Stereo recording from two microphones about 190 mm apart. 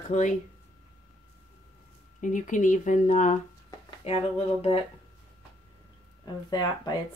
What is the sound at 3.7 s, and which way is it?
Speech, 25° left (ahead or behind).